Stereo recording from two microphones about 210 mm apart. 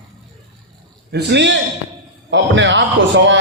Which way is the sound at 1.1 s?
55° right (ahead or behind).